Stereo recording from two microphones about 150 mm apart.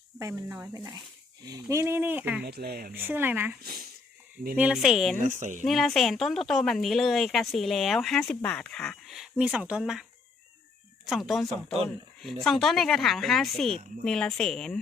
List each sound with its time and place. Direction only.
0.2 s speech: 20° right (ahead or behind)
2.4 s speech: 90° right
2.9 s speech: 15° right (ahead or behind)
3.6 s speech: 90° right
4.5 s speech: 5° right (ahead or behind)
5.2 s speech: 55° right (ahead or behind)
5.6 s speech: centre (ahead or behind)